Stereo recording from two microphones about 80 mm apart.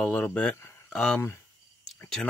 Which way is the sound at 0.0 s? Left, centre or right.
Centre.